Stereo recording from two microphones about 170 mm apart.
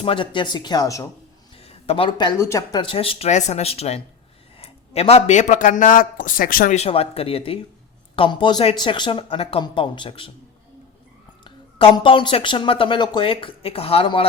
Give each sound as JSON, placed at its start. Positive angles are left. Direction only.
{"t": 0.0, "sound": "speech", "side_deg": 30}
{"t": 1.6, "sound": "speech", "side_deg": 35}
{"t": 6.7, "sound": "speech", "side_deg": 35}
{"t": 11.4, "sound": "speech", "side_deg": 30}